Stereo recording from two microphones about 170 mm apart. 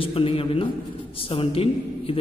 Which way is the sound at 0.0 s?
35° left (ahead or behind).